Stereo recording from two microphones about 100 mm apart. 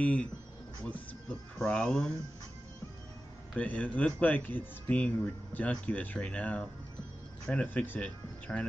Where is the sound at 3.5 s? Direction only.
15° left (ahead or behind).